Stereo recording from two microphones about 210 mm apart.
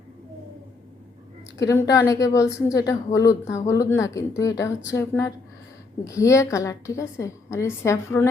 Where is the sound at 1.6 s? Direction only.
15° left (ahead or behind).